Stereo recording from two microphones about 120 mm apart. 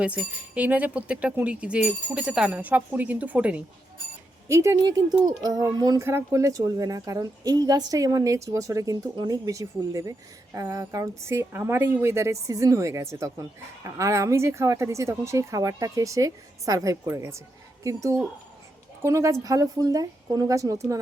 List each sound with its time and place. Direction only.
0.0 s speech: 10° right (ahead or behind)
4.4 s a woman's voice: 25° right (ahead or behind)
4.8 s a woman's voice: 35° right (ahead or behind)